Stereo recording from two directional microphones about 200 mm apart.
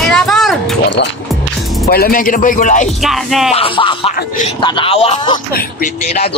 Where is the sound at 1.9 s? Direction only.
50° left (ahead or behind).